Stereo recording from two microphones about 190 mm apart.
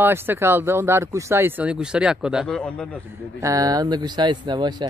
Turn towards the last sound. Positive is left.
turn(degrees=-25)  # may be behind; listen again after turning